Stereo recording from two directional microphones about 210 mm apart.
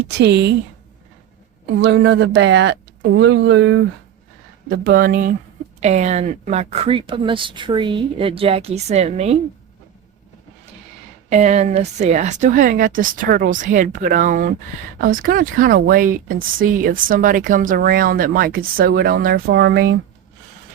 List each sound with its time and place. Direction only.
0.1 s speech: 55° right (ahead or behind)
1.8 s speech: 55° right (ahead or behind)
4.8 s speech: 45° right (ahead or behind)
5.8 s speech: 30° right (ahead or behind)
11.3 s a woman's voice: 35° right (ahead or behind); by 20.0 s 50° right (ahead or behind)